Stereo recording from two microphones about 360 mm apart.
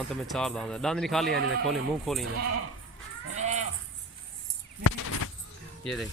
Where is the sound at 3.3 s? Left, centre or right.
Centre.